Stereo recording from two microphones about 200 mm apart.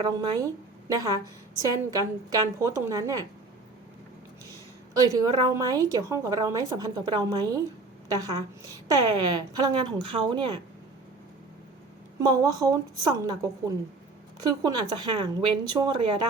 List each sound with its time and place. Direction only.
0.0 s a woman's voice: 20° right (ahead or behind)
4.9 s a woman's voice: 20° right (ahead or behind)
12.2 s speech: 20° right (ahead or behind)